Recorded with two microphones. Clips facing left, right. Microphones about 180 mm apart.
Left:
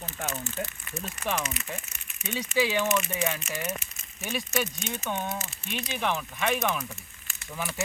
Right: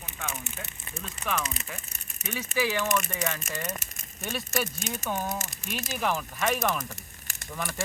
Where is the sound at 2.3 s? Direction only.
20° left (ahead or behind); by 4.7 s centre (ahead or behind).